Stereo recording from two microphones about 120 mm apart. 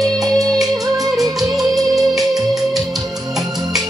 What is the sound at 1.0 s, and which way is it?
Music, 30° right (ahead or behind).